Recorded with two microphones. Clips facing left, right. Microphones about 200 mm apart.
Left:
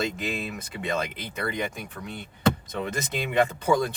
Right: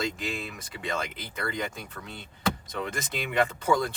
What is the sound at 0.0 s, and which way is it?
Speech, 20° left (ahead or behind).